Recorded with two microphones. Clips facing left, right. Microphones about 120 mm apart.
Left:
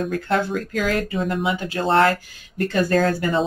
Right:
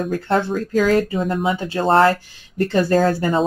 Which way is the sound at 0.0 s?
35° right (ahead or behind).